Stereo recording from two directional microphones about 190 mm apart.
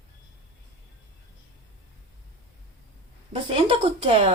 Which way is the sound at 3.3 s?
30° right (ahead or behind).